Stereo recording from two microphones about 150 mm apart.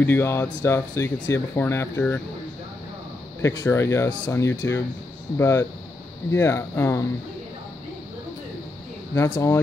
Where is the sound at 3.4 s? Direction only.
20° left (ahead or behind).